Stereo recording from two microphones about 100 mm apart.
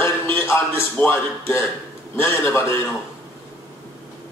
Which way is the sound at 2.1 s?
25° left (ahead or behind).